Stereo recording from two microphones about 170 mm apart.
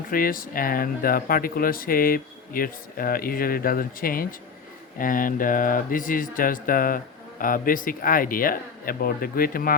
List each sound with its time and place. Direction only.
0.1 s speech: 55° left (ahead or behind)